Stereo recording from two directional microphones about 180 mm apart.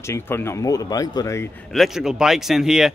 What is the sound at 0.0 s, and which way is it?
Speech, 15° left (ahead or behind).